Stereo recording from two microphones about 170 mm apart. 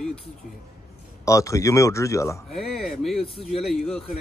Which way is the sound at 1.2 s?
20° left (ahead or behind).